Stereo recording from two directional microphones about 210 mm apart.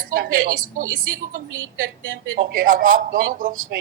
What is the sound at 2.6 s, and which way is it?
Speech, 40° right (ahead or behind).